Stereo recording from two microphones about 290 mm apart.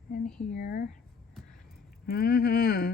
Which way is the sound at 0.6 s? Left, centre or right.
Left.